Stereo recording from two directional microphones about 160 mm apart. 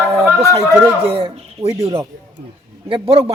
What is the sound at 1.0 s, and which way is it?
Speech, 35° right (ahead or behind).